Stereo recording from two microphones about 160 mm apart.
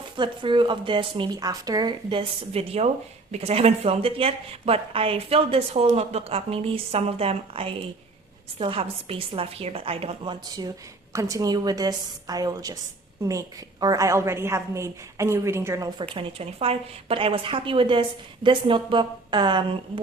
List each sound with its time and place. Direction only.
0.2 s speech: 30° right (ahead or behind)
11.1 s a woman's voice: 20° right (ahead or behind)
16.1 s a woman's voice: 40° right (ahead or behind)